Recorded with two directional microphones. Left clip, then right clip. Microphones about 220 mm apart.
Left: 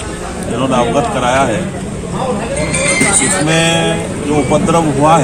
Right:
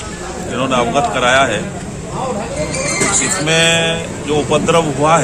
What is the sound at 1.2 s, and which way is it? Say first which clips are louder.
Speech: right 2 dB; 30° right (ahead or behind).